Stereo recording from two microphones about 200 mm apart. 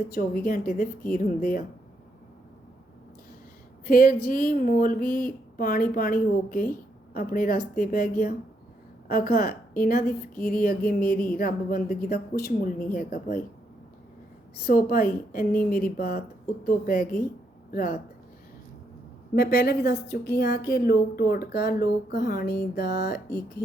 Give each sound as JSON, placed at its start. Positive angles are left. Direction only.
{"t": 0.1, "sound": "speech", "side_deg": 45}
{"t": 3.8, "sound": "speech", "side_deg": 45}
{"t": 14.5, "sound": "speech", "side_deg": 45}
{"t": 19.4, "sound": "speech", "side_deg": 55}